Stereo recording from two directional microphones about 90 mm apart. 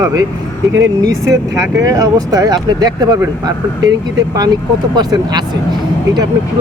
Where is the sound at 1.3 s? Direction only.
35° right (ahead or behind).